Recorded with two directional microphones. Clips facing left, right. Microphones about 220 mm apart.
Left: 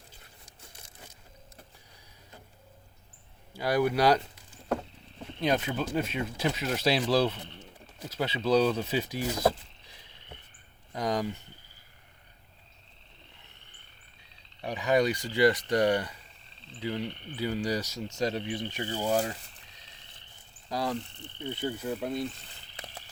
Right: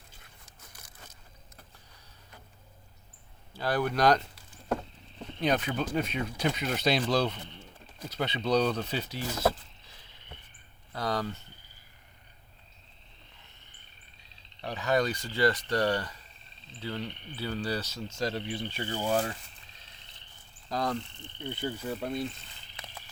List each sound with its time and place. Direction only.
0.6 s a sound: 25° left (ahead or behind)
3.5 s speech: 10° left (ahead or behind)
5.4 s speech: centre (ahead or behind)
14.6 s speech: 15° left (ahead or behind)
20.7 s speech: 10° left (ahead or behind)